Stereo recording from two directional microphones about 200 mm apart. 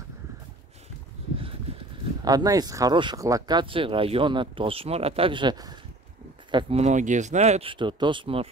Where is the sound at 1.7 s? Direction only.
30° right (ahead or behind).